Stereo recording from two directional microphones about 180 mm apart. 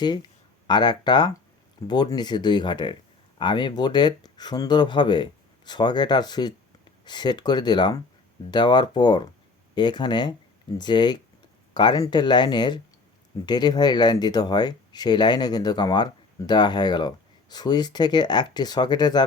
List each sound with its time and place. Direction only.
0.0 s speech: 25° left (ahead or behind)